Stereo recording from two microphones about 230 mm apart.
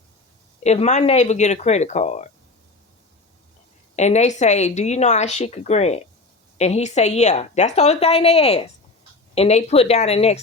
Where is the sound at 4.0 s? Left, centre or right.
Left.